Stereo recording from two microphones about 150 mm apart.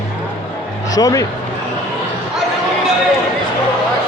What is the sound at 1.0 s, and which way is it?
Speech, 25° left (ahead or behind).